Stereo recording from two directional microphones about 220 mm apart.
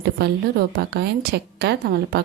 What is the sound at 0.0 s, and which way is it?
A woman's voice, 45° right (ahead or behind).